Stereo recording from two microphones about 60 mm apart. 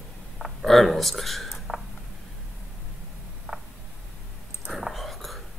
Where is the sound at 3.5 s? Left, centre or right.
Centre.